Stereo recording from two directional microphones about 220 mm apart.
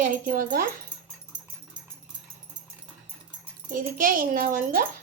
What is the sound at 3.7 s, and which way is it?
A child's voice, 40° right (ahead or behind).